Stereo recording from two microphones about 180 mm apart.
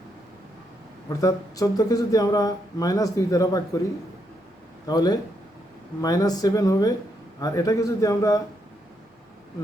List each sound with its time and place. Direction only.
1.2 s speech: 20° left (ahead or behind)
4.9 s speech: 20° left (ahead or behind)